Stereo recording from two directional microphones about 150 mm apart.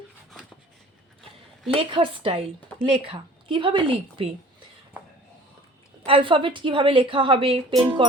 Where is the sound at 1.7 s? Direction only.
35° right (ahead or behind).